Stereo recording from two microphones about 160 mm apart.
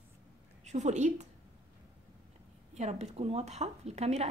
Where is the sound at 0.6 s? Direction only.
45° right (ahead or behind).